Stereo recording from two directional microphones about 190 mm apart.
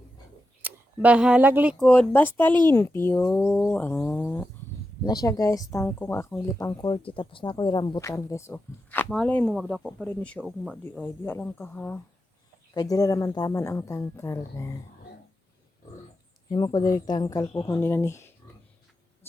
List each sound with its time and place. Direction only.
0.6 s speech: 5° right (ahead or behind)
1.8 s speech: 5° left (ahead or behind)
3.7 s a sound: 10° left (ahead or behind)
5.0 s speech: 20° left (ahead or behind); by 10.8 s centre (ahead or behind)
11.0 s speech: 10° left (ahead or behind)
12.7 s speech: 20° left (ahead or behind)
16.5 s speech: 25° left (ahead or behind)